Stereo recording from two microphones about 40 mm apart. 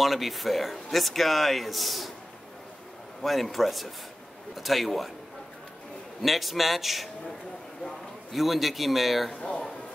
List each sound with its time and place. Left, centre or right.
0.0 s a man's voice: centre
3.2 s a man's voice: centre
6.2 s a man's voice: centre
8.3 s a man's voice: centre
9.4 s a sound: left